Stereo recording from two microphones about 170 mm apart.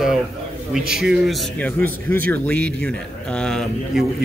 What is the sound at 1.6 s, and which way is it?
Speech, 10° left (ahead or behind).